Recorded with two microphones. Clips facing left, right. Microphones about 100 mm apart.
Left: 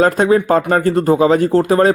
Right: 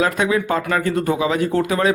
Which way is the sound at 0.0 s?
40° left (ahead or behind).